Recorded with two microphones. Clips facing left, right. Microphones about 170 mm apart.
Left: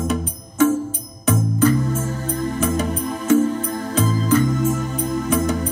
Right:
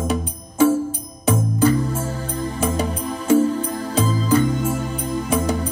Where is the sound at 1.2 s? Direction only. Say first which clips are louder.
Even; 30° right (ahead or behind).